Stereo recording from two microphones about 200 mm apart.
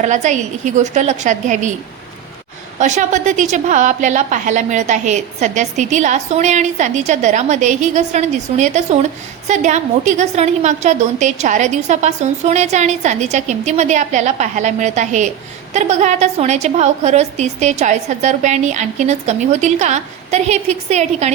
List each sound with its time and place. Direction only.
0.0 s a woman's voice: 35° right (ahead or behind)
2.7 s a woman's voice: 40° right (ahead or behind)